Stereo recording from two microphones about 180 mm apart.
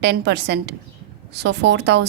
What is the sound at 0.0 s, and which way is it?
A woman's voice, 70° right (ahead or behind).